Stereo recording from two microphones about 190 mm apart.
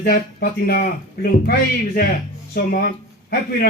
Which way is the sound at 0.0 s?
55° left (ahead or behind).